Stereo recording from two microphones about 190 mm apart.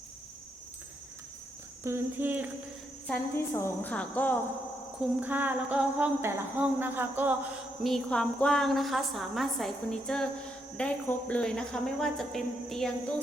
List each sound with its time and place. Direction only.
1.8 s speech: 10° right (ahead or behind)
3.1 s a woman's voice: 15° left (ahead or behind)
5.2 s speech: 10° right (ahead or behind)
7.9 s a woman's voice: 5° left (ahead or behind)